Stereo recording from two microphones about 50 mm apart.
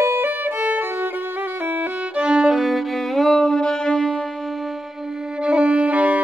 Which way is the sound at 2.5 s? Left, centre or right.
Centre.